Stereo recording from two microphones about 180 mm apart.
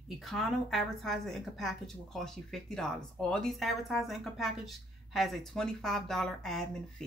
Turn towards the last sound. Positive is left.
turn(degrees=0)  # may be behind; listen again after turning